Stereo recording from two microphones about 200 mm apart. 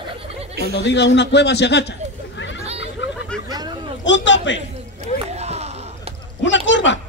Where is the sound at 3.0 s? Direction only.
65° left (ahead or behind).